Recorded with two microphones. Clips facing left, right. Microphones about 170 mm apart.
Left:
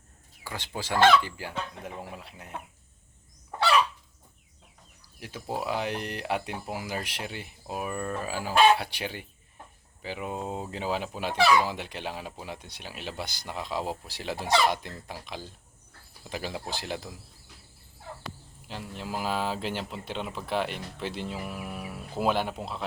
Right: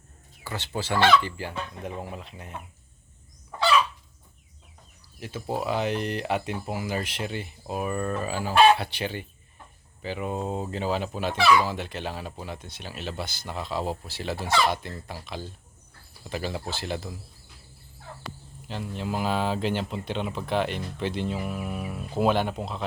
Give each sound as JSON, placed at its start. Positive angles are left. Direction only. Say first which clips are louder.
{"t": 0.4, "sound": "speech", "louder": "right 4 dB", "side_deg": 10}
{"t": 5.2, "sound": "speech", "louder": "right 3 dB", "side_deg": 10}
{"t": 18.7, "sound": "speech", "louder": "right 4 dB", "side_deg": 5}